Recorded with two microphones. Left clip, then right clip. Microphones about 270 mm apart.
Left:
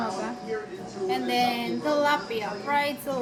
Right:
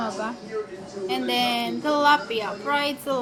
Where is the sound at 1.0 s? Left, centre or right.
Centre.